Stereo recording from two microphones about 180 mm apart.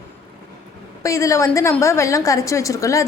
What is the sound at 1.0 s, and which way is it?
A woman's voice, 15° left (ahead or behind).